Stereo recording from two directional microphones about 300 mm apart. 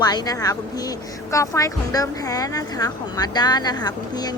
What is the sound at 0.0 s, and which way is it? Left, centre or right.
Speech, centre.